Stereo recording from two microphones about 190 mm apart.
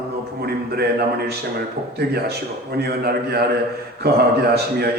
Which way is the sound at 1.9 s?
55° right (ahead or behind).